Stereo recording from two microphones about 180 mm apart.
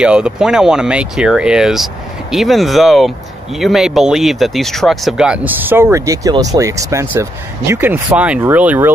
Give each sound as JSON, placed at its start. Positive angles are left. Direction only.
{"t": 0.0, "sound": "speech", "side_deg": -5}